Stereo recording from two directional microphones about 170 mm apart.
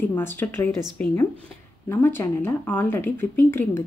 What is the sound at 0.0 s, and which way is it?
Speech, 10° left (ahead or behind).